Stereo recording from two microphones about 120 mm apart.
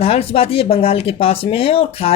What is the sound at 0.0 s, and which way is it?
Speech, 55° left (ahead or behind).